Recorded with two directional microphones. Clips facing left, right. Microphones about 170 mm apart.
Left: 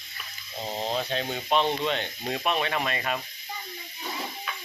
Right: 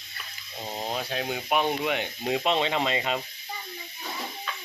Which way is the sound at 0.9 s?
5° right (ahead or behind).